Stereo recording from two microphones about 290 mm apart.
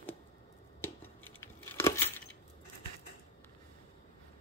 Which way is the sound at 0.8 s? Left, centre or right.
Centre.